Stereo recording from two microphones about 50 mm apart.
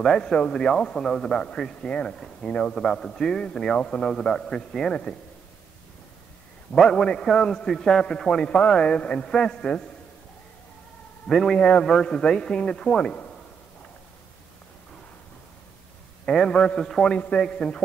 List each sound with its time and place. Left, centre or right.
0.0 s a man's voice: centre
1.8 s a man's voice: left
2.0 s a man's voice: centre
2.4 s a man's voice: left
2.7 s a man's voice: centre
6.7 s a man's voice: centre
11.2 s a man's voice: centre
11.5 s a man's voice: left
11.8 s a man's voice: centre
16.3 s a man's voice: centre
16.8 s a man's voice: centre